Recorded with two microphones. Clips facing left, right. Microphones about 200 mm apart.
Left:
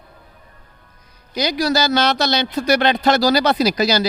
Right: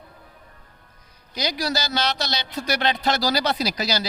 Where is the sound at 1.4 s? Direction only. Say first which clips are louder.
Left 7 dB; 70° left (ahead or behind).